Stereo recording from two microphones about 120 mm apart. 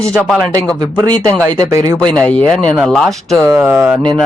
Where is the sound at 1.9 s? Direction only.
5° left (ahead or behind).